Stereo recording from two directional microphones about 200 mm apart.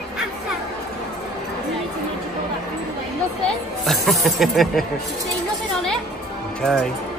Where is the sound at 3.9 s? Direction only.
Centre (ahead or behind).